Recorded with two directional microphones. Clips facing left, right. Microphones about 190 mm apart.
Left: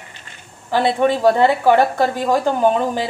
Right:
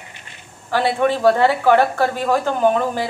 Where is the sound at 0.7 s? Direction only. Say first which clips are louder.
Left 2 dB; 15° left (ahead or behind).